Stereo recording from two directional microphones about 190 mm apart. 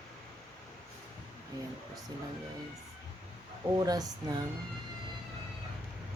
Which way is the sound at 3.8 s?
20° right (ahead or behind).